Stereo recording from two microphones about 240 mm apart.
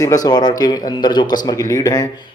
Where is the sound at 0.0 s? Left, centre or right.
Centre.